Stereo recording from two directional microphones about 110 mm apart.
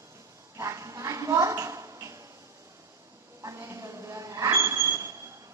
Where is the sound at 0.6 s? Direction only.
30° right (ahead or behind).